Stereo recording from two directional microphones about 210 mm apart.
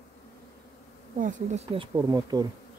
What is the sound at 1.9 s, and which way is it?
Speech, 15° right (ahead or behind).